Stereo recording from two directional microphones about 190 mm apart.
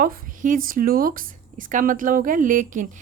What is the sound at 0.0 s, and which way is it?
A woman's voice, 45° right (ahead or behind).